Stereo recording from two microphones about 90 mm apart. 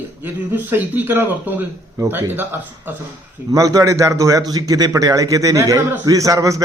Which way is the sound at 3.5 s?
40° right (ahead or behind).